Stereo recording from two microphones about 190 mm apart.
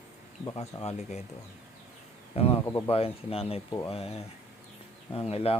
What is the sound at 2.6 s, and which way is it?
A man's voice, 25° left (ahead or behind).